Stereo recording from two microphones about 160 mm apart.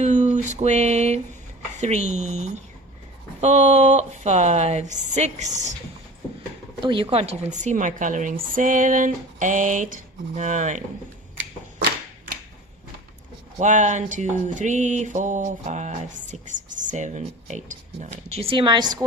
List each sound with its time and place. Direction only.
0.0 s speech: 45° right (ahead or behind)
6.8 s speech: 35° right (ahead or behind); by 10.8 s 50° right (ahead or behind)
13.6 s speech: 50° right (ahead or behind); by 18.9 s 25° right (ahead or behind)